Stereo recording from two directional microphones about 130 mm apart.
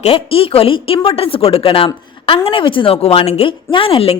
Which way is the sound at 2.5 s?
40° left (ahead or behind).